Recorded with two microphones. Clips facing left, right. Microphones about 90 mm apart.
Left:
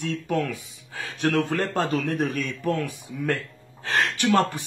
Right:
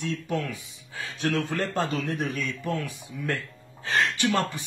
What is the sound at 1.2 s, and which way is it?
Speech, 50° left (ahead or behind).